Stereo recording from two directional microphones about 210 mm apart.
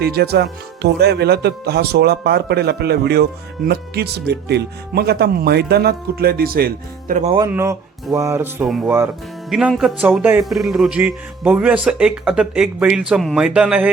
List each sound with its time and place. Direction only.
0.0 s speech: 50° right (ahead or behind)
7.3 s music: 15° right (ahead or behind)
9.5 s speech: 5° right (ahead or behind)